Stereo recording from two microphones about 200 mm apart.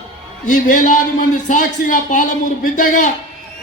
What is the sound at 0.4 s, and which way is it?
A man's voice, 40° left (ahead or behind).